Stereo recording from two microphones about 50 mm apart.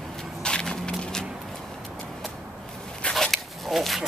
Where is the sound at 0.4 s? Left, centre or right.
Centre.